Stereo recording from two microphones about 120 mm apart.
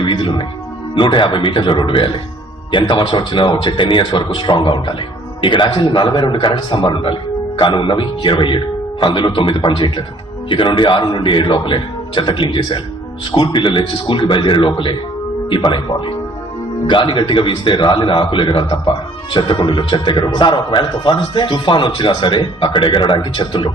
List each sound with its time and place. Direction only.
0.0 s a man's voice: 45° left (ahead or behind)